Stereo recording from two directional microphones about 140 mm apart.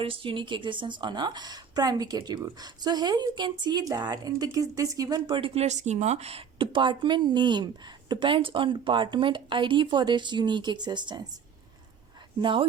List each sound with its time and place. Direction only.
0.0 s a woman's voice: 40° right (ahead or behind)
5.5 s speech: 55° right (ahead or behind); by 11.3 s 30° right (ahead or behind)
12.4 s speech: 35° right (ahead or behind)